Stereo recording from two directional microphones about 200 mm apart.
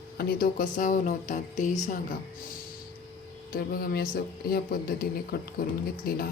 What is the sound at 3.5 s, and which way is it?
Speech, 45° left (ahead or behind).